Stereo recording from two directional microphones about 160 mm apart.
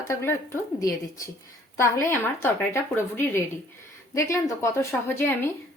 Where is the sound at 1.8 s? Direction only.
15° left (ahead or behind).